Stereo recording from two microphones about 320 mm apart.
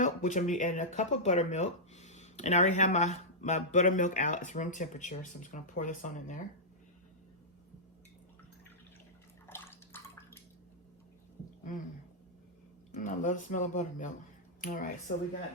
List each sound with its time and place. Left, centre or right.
0.0 s speech: left
9.5 s drip: centre
13.0 s speech: left